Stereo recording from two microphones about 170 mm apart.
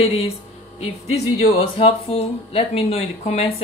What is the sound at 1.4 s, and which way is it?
Speech, 35° left (ahead or behind).